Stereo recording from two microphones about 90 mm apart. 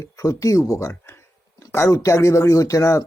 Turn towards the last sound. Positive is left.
turn(degrees=35)  # may be behind; listen again after turning